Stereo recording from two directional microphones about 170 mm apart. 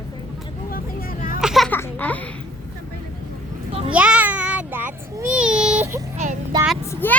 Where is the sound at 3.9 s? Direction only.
5° right (ahead or behind).